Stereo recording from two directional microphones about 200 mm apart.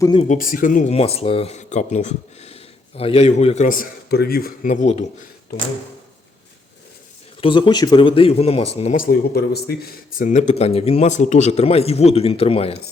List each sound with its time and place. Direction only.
0.0 s speech: 25° left (ahead or behind)
0.3 s speech: 45° left (ahead or behind)
7.4 s speech: 25° left (ahead or behind)